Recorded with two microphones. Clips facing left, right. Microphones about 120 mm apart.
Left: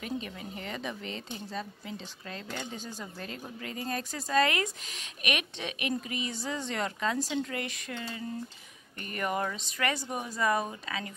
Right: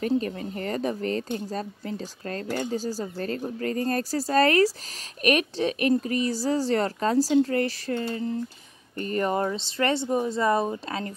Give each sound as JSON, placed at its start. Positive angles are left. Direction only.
{"t": 0.2, "sound": "speech", "side_deg": -45}